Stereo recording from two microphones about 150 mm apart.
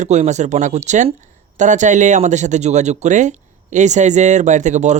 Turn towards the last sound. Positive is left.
turn(degrees=-50)  # may be behind; listen again after turning